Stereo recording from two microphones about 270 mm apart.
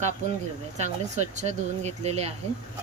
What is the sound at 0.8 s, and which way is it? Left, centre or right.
Speech, right.